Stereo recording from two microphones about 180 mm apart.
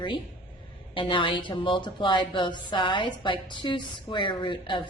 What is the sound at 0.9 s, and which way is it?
A woman's voice, 30° left (ahead or behind).